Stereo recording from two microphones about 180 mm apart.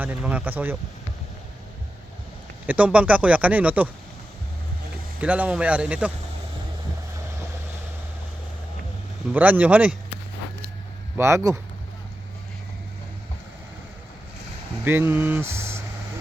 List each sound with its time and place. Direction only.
0.0 s speech: 10° right (ahead or behind)
2.6 s speech: 10° right (ahead or behind)
5.2 s speech: 5° right (ahead or behind)
9.3 s speech: 10° right (ahead or behind)
11.2 s speech: 15° right (ahead or behind)
14.8 s speech: 10° right (ahead or behind)